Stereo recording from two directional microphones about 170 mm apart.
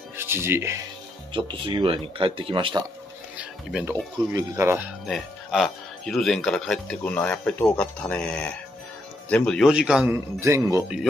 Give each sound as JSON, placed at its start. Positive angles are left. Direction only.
{"t": 0.2, "sound": "speech", "side_deg": -15}
{"t": 1.3, "sound": "speech", "side_deg": -30}
{"t": 3.3, "sound": "music", "side_deg": -10}
{"t": 4.3, "sound": "speech", "side_deg": -20}
{"t": 5.0, "sound": "speech", "side_deg": 0}